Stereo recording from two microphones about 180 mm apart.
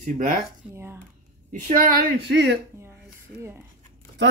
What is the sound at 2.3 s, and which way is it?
Speech, 75° right (ahead or behind).